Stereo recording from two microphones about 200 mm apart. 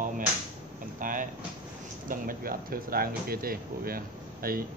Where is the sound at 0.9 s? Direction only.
40° right (ahead or behind).